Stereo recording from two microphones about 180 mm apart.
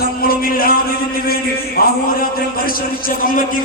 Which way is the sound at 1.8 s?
55° left (ahead or behind).